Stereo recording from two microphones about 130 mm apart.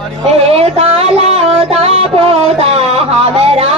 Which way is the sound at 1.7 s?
50° right (ahead or behind).